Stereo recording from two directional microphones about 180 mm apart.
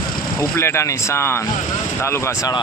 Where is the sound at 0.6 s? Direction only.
15° left (ahead or behind).